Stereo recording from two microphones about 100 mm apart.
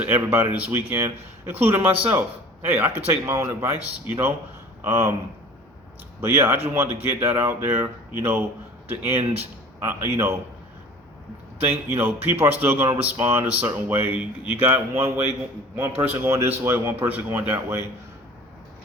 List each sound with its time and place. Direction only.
0.0 s speech: 20° right (ahead or behind)
6.1 s speech: 25° right (ahead or behind)
11.7 s speech: 20° right (ahead or behind)